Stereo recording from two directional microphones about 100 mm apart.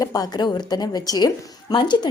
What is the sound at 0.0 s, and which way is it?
A woman's voice, 40° left (ahead or behind).